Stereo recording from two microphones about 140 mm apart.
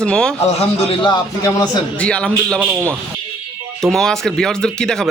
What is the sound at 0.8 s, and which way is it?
Speech, 35° left (ahead or behind).